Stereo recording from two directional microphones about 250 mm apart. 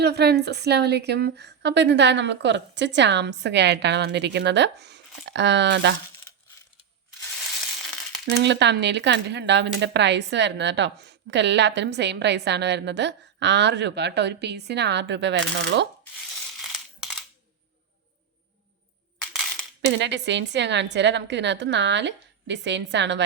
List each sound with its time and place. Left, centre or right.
0.0 s speech: right
8.2 s speech: right
16.6 s a sound: centre
19.8 s speech: right